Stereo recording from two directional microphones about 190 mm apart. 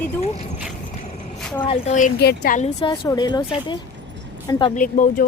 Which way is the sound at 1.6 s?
30° left (ahead or behind).